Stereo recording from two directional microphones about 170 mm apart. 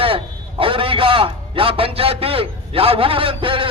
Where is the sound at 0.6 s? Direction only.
30° right (ahead or behind).